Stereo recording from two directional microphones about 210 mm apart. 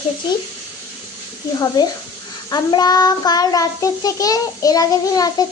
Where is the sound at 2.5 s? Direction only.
20° left (ahead or behind).